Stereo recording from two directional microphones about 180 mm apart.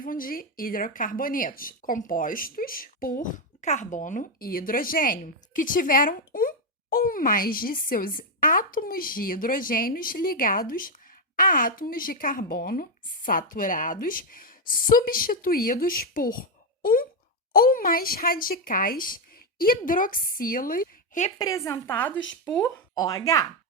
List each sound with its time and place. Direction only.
0.0 s speech: 50° left (ahead or behind)
21.3 s a woman's voice: 20° left (ahead or behind)
23.0 s speech: 20° left (ahead or behind)